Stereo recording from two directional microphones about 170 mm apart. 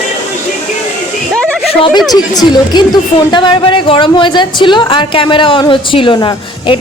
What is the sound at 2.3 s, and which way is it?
A woman's voice, 25° left (ahead or behind).